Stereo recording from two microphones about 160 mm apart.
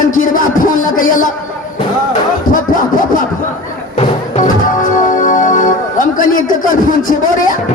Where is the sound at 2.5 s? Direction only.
55° left (ahead or behind).